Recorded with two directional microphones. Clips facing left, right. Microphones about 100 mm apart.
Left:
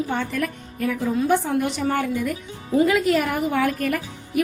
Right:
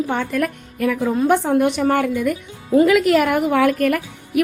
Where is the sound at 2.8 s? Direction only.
80° right.